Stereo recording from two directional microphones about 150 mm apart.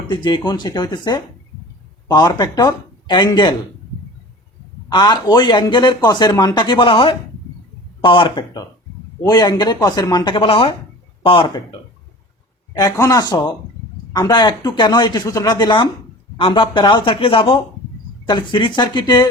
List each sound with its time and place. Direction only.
0.1 s speech: 30° left (ahead or behind)
4.9 s speech: 25° left (ahead or behind)
12.7 s speech: 25° left (ahead or behind)